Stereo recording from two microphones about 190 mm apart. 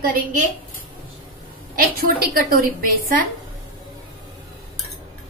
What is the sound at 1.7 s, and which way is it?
Speech, 50° right (ahead or behind).